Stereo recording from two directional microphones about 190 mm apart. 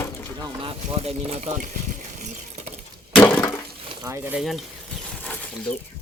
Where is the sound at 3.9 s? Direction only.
15° right (ahead or behind).